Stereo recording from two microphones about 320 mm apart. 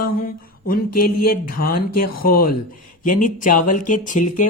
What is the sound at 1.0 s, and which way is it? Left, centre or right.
Speech, left.